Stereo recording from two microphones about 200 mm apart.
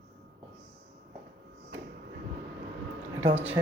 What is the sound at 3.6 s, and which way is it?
Speech, 20° right (ahead or behind).